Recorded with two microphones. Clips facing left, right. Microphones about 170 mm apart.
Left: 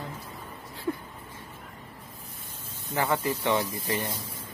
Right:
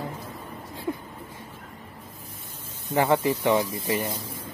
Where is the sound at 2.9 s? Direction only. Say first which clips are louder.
Right 5 dB; 15° right (ahead or behind).